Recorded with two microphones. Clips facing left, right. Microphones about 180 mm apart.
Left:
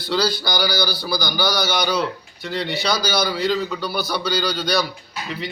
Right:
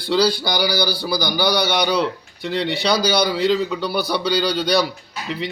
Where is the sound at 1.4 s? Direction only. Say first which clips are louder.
Right 4 dB; 65° right (ahead or behind).